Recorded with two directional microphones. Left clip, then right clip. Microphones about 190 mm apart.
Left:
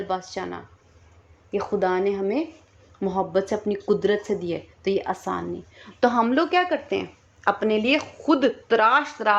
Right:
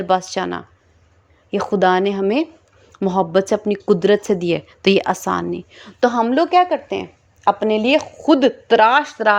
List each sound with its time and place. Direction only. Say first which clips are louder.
0.1 s speech: right 13 dB; 40° right (ahead or behind)
6.0 s a woman's voice: right 4 dB; 20° right (ahead or behind)